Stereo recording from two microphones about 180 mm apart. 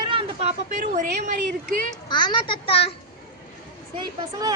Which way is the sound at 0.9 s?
45° right (ahead or behind).